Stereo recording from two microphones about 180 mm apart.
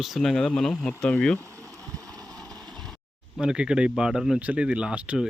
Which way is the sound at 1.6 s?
20° right (ahead or behind).